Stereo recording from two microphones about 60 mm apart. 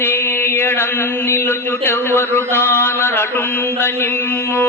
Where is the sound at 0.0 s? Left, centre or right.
Left.